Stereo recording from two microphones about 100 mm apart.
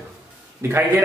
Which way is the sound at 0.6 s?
25° right (ahead or behind).